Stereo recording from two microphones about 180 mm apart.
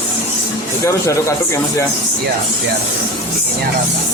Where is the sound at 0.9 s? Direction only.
15° left (ahead or behind).